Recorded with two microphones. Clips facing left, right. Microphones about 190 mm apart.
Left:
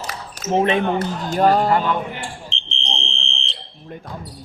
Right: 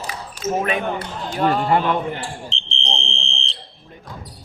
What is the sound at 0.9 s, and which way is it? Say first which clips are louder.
Speech: left 5 dB; 45° left (ahead or behind).